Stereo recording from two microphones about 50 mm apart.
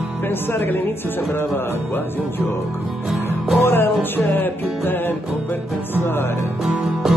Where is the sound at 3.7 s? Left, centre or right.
Left.